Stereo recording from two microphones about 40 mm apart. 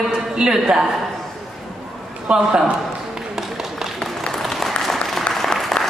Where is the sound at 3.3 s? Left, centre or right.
Centre.